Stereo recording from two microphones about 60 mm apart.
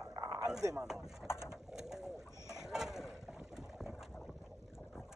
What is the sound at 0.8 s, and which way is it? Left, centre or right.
Speech, centre.